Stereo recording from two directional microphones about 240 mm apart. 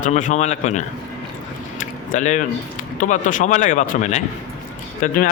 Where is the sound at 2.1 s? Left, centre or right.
Left.